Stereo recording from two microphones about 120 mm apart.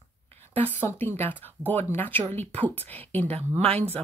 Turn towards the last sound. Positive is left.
turn(degrees=-55)  # may be behind; listen again after turning